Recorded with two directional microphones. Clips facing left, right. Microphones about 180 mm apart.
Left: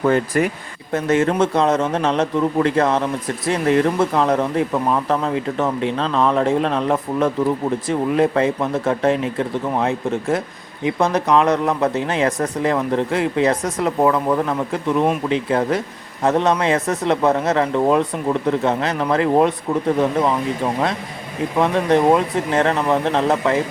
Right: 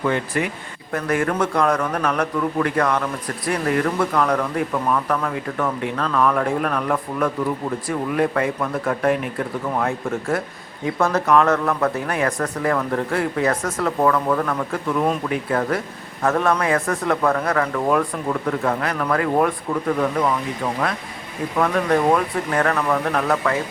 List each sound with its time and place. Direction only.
0.0 s speech: 40° left (ahead or behind)
0.9 s a man's voice: 25° left (ahead or behind)
21.6 s a man's voice: 25° left (ahead or behind)